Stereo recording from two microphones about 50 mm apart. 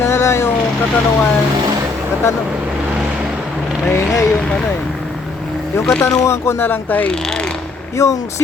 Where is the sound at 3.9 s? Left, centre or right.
Left.